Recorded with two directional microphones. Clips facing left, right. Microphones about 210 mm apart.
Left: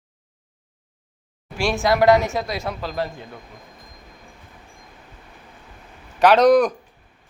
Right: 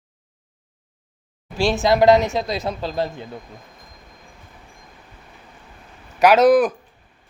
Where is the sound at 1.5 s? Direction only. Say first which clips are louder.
Right 2 dB; 20° right (ahead or behind).